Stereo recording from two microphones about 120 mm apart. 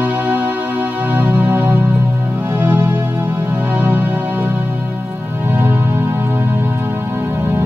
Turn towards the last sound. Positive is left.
turn(degrees=-20)  # may be behind; listen again after turning